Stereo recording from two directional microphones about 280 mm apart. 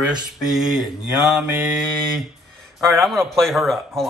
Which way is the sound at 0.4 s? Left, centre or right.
Centre.